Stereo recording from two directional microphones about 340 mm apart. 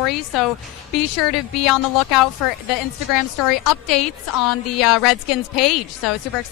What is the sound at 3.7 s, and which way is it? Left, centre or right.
Speech, left.